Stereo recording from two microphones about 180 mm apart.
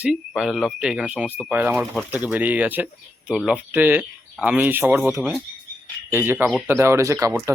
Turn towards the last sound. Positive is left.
turn(degrees=-15)  # may be behind; listen again after turning